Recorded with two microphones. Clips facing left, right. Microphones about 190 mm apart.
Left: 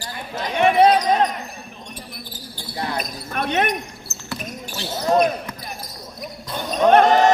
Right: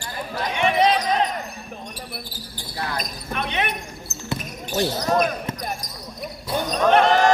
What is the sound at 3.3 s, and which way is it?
Basketball bounce, 45° left (ahead or behind).